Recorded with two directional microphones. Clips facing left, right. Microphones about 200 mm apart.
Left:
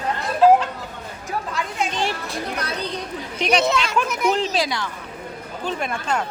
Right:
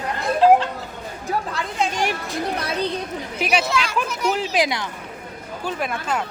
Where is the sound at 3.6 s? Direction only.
25° left (ahead or behind).